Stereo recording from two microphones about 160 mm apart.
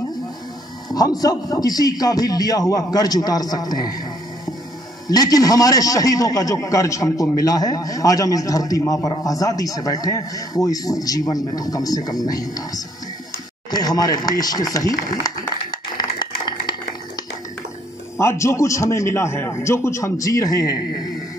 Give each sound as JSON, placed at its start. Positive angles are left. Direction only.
{"t": 0.8, "sound": "a man's voice", "side_deg": 25}
{"t": 5.0, "sound": "a man's voice", "side_deg": 25}
{"t": 16.0, "sound": "a sound", "side_deg": 25}
{"t": 18.1, "sound": "a man's voice", "side_deg": 15}